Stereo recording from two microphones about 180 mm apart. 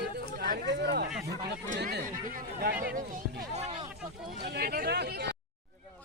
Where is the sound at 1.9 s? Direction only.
50° right (ahead or behind).